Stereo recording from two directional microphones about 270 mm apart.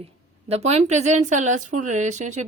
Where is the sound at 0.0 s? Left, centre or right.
Right.